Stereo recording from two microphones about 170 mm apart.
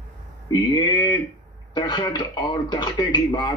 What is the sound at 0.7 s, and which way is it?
Speech, 25° left (ahead or behind).